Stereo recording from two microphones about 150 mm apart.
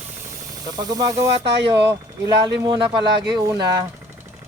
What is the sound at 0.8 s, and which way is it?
Speech, 25° right (ahead or behind).